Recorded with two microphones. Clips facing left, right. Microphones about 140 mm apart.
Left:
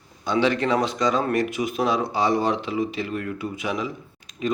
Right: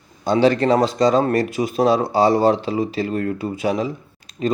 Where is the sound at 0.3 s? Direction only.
35° right (ahead or behind).